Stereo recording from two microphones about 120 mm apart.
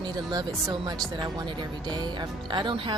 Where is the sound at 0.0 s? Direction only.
35° right (ahead or behind).